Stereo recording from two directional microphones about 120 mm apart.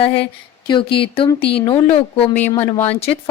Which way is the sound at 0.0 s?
50° left (ahead or behind).